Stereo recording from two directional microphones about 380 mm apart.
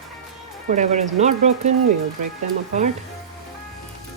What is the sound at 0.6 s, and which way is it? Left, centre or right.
Speech, centre.